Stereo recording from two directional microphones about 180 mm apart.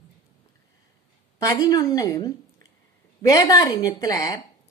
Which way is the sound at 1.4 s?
20° left (ahead or behind).